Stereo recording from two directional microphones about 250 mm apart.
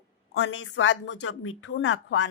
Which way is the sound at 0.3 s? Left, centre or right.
Left.